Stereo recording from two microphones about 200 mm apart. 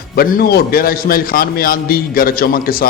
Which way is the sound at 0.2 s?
50° left (ahead or behind).